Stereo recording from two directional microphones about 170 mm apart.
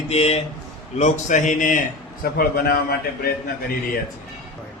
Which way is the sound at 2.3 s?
65° left (ahead or behind).